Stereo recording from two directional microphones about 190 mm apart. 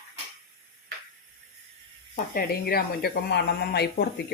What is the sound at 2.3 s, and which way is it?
Speech, 50° left (ahead or behind).